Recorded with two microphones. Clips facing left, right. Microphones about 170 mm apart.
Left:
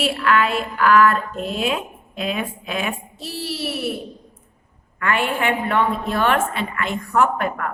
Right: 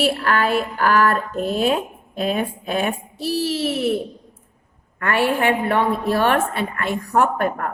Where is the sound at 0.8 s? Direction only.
35° right (ahead or behind).